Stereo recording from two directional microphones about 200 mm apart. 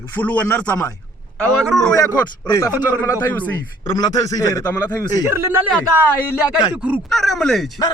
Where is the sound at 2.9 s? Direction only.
10° left (ahead or behind).